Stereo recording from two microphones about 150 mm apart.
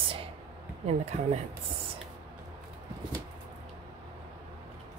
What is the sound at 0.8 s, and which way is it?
Speech, 45° right (ahead or behind).